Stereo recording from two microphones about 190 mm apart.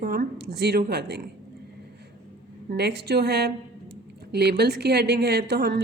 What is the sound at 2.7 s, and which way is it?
A woman's voice, 60° right (ahead or behind).